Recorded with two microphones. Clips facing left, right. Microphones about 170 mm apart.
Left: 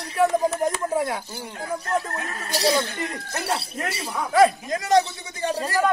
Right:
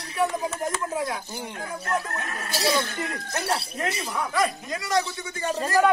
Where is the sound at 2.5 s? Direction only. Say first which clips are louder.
Left 3 dB; 15° left (ahead or behind).